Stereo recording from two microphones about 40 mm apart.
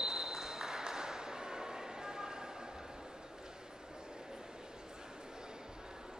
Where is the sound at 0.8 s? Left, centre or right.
Centre.